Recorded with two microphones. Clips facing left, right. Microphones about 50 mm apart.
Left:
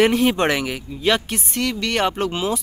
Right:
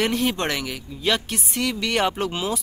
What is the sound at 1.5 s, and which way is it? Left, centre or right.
Speech, centre.